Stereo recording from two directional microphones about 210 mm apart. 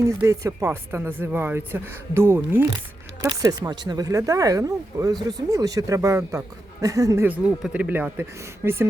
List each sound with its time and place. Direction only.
0.0 s speech: 15° right (ahead or behind)